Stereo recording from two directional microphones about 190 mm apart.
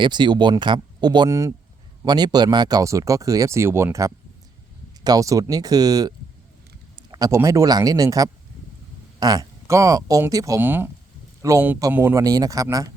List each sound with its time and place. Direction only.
0.0 s speech: 25° right (ahead or behind)